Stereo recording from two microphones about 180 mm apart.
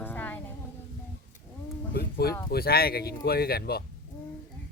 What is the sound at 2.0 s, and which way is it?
Speech, 60° left (ahead or behind).